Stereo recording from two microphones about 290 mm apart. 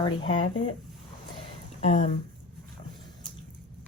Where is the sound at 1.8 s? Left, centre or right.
Left.